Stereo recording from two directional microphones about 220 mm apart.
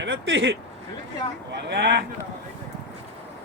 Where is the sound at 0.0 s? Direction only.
55° right (ahead or behind).